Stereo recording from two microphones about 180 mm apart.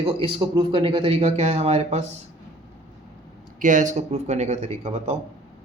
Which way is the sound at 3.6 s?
45° right (ahead or behind).